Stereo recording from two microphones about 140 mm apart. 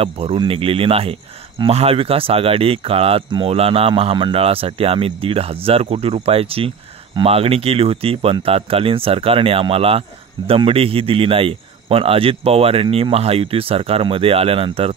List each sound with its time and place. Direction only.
0.0 s speech: 40° right (ahead or behind)